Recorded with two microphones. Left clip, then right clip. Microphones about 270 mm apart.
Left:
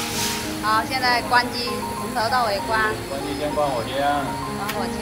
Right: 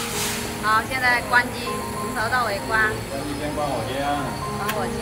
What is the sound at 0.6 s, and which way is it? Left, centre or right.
A woman's voice, centre.